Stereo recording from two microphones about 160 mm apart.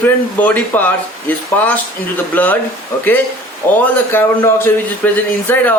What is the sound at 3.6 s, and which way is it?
A man's voice, 10° left (ahead or behind).